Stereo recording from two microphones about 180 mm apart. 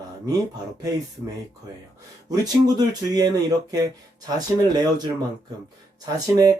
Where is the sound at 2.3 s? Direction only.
20° right (ahead or behind).